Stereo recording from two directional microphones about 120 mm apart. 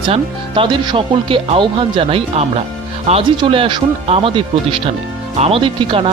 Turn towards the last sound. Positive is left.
turn(degrees=-45)  # may be behind; listen again after turning